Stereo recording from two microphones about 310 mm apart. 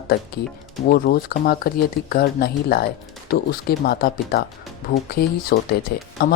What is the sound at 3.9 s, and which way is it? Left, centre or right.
Speech, left.